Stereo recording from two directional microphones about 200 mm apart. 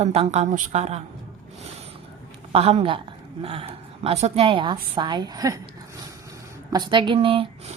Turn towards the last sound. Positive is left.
turn(degrees=-25)  # may be behind; listen again after turning